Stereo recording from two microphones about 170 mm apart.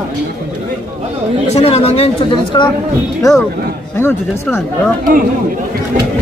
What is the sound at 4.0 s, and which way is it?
Speech, 15° left (ahead or behind).